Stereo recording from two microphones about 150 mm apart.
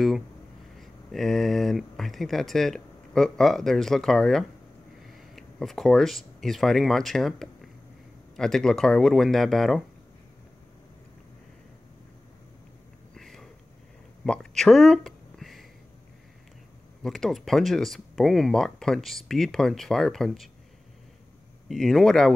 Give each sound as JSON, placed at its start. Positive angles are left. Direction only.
{"t": 0.7, "sound": "speech", "side_deg": 0}
{"t": 13.1, "sound": "a sound", "side_deg": 5}
{"t": 17.0, "sound": "speech", "side_deg": 0}
{"t": 21.6, "sound": "speech", "side_deg": 0}